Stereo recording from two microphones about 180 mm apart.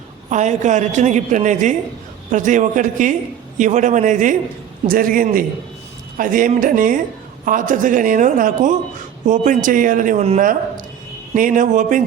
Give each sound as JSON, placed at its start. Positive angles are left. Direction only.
{"t": 0.3, "sound": "speech", "side_deg": -40}